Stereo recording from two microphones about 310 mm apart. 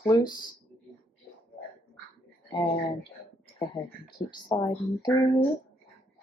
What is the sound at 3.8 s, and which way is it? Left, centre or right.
Speech, centre.